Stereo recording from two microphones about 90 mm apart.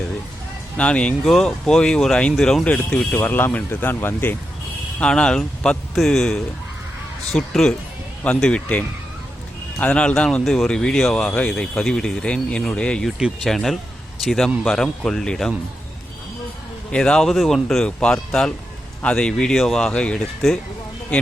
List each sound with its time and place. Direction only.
0.8 s speech: 10° left (ahead or behind)
4.9 s speech: 10° left (ahead or behind)
9.8 s speech: 15° left (ahead or behind)
13.1 s speech: 5° right (ahead or behind)
16.9 s speech: 5° left (ahead or behind)